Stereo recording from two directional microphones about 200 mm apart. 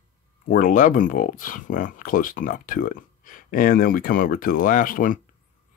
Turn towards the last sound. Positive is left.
turn(degrees=40)  # may be behind; listen again after turning